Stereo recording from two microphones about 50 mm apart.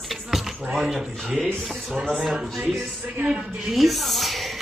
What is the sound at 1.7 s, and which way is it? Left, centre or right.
A woman's voice, centre.